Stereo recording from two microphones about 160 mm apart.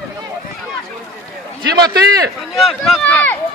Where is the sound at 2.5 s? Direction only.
Centre (ahead or behind).